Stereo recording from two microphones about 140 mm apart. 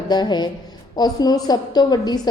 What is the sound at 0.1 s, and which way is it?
A woman's voice, 30° left (ahead or behind).